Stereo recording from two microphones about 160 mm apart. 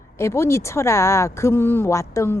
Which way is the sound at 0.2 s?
15° left (ahead or behind).